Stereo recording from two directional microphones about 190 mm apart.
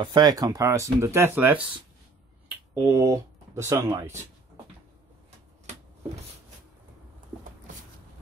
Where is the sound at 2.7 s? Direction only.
15° right (ahead or behind).